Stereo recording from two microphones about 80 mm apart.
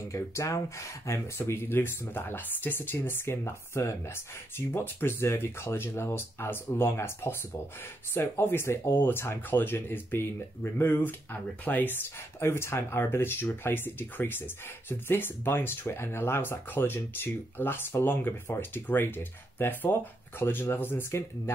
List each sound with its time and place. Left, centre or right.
0.1 s speech: left
1.4 s speech: left